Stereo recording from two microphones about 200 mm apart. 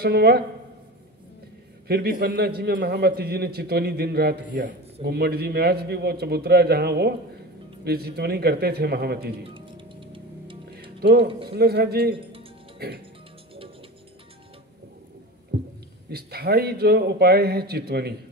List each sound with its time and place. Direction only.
0.0 s a man's voice: 55° right (ahead or behind)
1.9 s a man's voice: 50° right (ahead or behind)
9.5 s music: 25° right (ahead or behind)
10.7 s music: 50° right (ahead or behind)
11.4 s a man's voice: 55° right (ahead or behind)
12.7 s music: 50° right (ahead or behind)
15.5 s a sound: 55° right (ahead or behind)
16.1 s a man's voice: 50° right (ahead or behind)